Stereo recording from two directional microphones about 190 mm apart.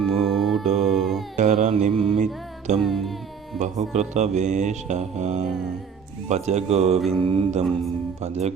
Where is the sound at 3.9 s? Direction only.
35° right (ahead or behind).